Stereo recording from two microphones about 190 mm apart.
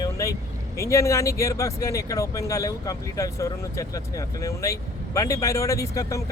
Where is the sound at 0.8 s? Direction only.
15° left (ahead or behind).